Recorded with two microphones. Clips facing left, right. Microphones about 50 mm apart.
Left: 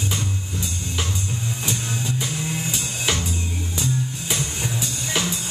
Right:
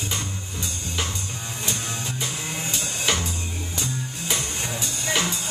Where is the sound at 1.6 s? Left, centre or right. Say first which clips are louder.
Even; centre.